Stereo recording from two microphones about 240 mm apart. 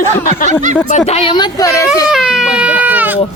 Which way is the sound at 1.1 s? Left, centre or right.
Centre.